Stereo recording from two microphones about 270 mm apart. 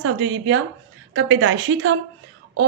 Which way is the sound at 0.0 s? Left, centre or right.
Right.